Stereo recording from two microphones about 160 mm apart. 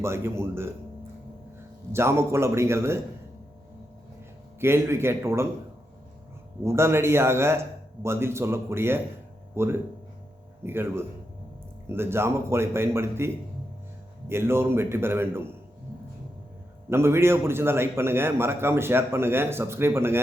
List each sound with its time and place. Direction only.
0.0 s a man's voice: 15° right (ahead or behind)
1.9 s a man's voice: 15° right (ahead or behind)
4.6 s a man's voice: 15° right (ahead or behind)
6.7 s a man's voice: 15° right (ahead or behind)
16.9 s a man's voice: 15° right (ahead or behind)